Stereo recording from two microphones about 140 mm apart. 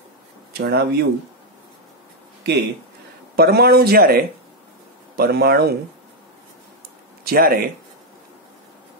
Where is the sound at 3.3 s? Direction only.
90° right.